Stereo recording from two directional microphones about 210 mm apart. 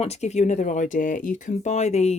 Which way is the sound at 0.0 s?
30° left (ahead or behind).